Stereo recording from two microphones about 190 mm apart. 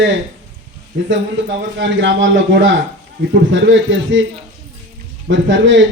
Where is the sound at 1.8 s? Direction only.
70° right (ahead or behind).